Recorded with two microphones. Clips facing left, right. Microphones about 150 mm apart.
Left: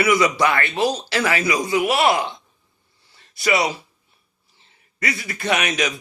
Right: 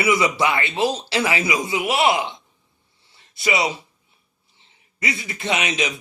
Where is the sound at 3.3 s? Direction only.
25° right (ahead or behind).